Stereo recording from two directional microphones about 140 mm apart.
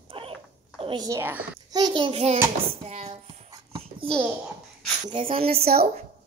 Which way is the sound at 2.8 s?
45° right (ahead or behind).